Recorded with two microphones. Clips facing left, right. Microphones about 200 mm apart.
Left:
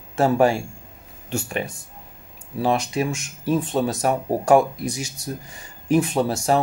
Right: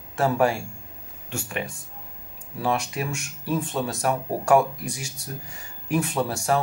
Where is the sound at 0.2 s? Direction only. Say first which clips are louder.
Left 4 dB; 30° left (ahead or behind).